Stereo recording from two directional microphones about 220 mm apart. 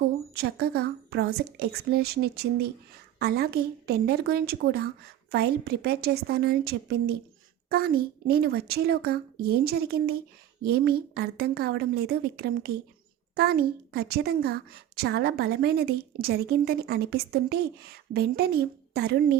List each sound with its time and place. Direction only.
0.3 s a woman's voice: 45° right (ahead or behind)